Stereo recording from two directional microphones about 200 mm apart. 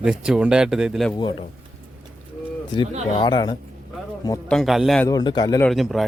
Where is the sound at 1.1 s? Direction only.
25° left (ahead or behind).